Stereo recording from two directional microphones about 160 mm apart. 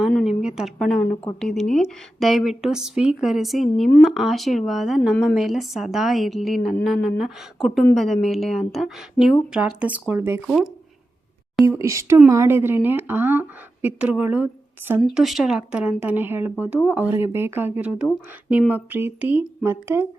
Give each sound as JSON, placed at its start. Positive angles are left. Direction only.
{"t": 0.0, "sound": "a sound", "side_deg": 0}
{"t": 1.4, "sound": "a woman's voice", "side_deg": 5}
{"t": 10.4, "sound": "a woman's voice", "side_deg": 0}
{"t": 11.6, "sound": "speech", "side_deg": -20}
{"t": 15.0, "sound": "speech", "side_deg": 0}